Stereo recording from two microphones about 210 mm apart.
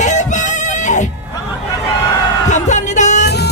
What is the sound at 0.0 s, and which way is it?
Music, 35° left (ahead or behind).